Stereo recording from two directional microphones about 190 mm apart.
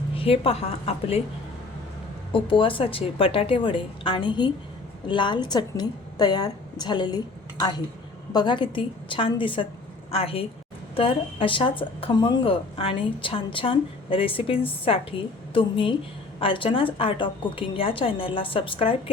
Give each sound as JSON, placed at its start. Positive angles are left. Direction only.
{"t": 0.2, "sound": "a woman's voice", "side_deg": 30}
{"t": 2.3, "sound": "a woman's voice", "side_deg": 25}
{"t": 8.3, "sound": "a woman's voice", "side_deg": 25}